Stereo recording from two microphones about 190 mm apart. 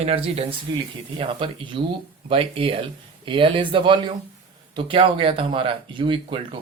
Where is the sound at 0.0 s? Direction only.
30° right (ahead or behind).